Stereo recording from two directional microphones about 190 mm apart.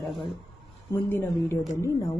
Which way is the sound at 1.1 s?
10° left (ahead or behind).